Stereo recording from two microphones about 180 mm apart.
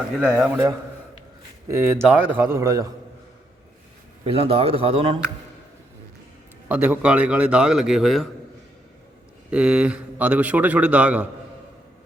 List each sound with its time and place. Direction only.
0.2 s a man's voice: 5° right (ahead or behind)
4.3 s speech: 30° right (ahead or behind)
6.7 s a man's voice: 10° right (ahead or behind)
9.5 s a man's voice: 5° right (ahead or behind)